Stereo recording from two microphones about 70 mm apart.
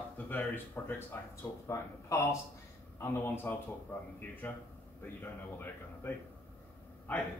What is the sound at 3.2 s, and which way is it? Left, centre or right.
A man's voice, left.